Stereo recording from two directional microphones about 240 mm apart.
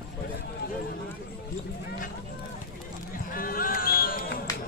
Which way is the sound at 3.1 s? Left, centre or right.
Left.